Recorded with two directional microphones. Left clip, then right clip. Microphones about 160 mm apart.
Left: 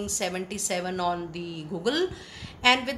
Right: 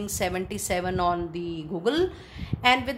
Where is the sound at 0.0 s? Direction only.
50° right (ahead or behind).